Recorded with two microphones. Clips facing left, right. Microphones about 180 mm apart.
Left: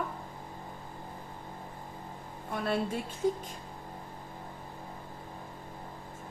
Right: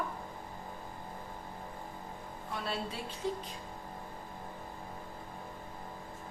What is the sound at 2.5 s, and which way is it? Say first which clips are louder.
Speech: left 7 dB; 55° left (ahead or behind).